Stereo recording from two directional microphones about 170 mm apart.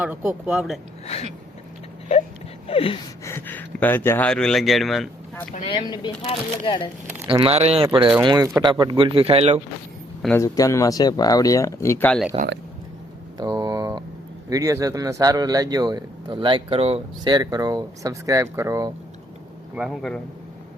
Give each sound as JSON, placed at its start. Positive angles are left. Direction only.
{"t": 0.0, "sound": "a man's voice", "side_deg": -15}
{"t": 2.6, "sound": "gasp", "side_deg": 35}
{"t": 3.2, "sound": "speech", "side_deg": 10}
{"t": 5.6, "sound": "speech", "side_deg": 25}
{"t": 7.3, "sound": "speech", "side_deg": -30}
{"t": 8.2, "sound": "speech", "side_deg": -25}
{"t": 10.4, "sound": "speech", "side_deg": 20}
{"t": 13.3, "sound": "a sound", "side_deg": -20}
{"t": 14.5, "sound": "speech", "side_deg": -20}
{"t": 17.3, "sound": "speech", "side_deg": -20}
{"t": 19.7, "sound": "a man's voice", "side_deg": 0}